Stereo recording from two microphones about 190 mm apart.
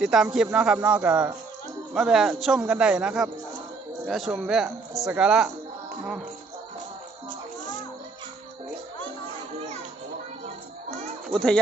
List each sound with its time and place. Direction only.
0.0 s speech: 5° right (ahead or behind)
7.3 s music: 40° left (ahead or behind)
11.3 s speech: 5° left (ahead or behind)